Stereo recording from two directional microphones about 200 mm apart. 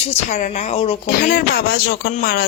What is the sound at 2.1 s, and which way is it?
Speech, 45° left (ahead or behind).